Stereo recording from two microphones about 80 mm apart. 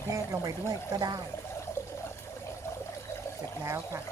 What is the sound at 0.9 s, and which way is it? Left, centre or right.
Speech, right.